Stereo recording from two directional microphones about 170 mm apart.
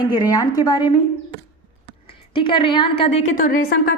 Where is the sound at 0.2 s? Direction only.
20° left (ahead or behind).